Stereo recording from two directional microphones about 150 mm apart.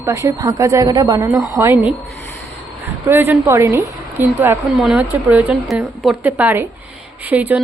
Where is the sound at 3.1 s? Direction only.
15° right (ahead or behind).